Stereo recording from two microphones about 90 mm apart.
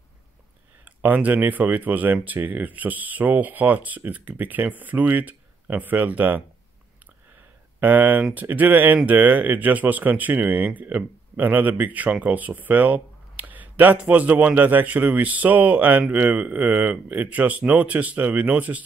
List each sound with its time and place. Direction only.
0.8 s speech: 20° right (ahead or behind)
7.8 s speech: 20° right (ahead or behind)